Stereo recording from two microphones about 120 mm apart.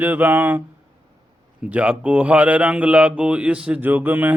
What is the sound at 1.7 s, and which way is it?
Speech, 10° right (ahead or behind).